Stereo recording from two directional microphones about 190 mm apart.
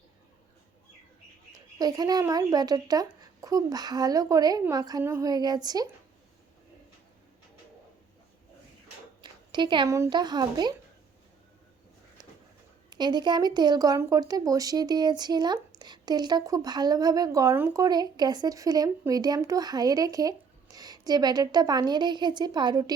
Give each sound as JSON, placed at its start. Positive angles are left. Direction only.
{"t": 1.5, "sound": "speech", "side_deg": -20}
{"t": 9.2, "sound": "speech", "side_deg": -25}
{"t": 12.9, "sound": "speech", "side_deg": -20}